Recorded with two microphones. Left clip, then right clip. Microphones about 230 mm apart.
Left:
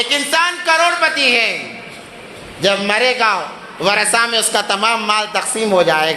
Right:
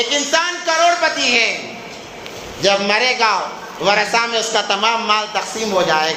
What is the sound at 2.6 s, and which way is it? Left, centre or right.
A man's voice, left.